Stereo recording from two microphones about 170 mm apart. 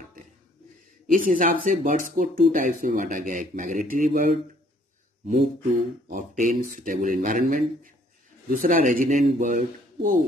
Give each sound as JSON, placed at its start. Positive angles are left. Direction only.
{"t": 1.1, "sound": "speech", "side_deg": -55}